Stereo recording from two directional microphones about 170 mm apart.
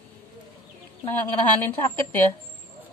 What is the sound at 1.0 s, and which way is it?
A woman's voice, 10° left (ahead or behind).